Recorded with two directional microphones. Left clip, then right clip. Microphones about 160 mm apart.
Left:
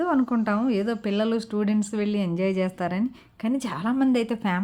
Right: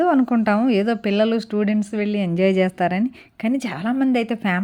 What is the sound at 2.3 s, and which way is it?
A woman's voice, 25° right (ahead or behind).